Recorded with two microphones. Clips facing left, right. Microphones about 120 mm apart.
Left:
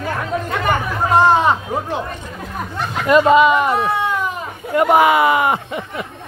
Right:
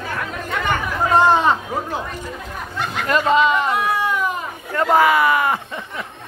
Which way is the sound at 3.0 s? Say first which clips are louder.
Left 5 dB; 10° left (ahead or behind).